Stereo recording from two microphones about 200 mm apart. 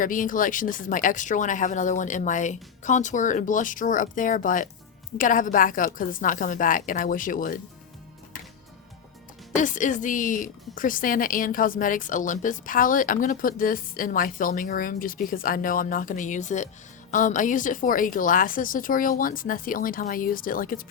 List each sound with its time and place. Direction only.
0.0 s a woman's voice: 40° left (ahead or behind)
9.6 s a woman's voice: 40° left (ahead or behind)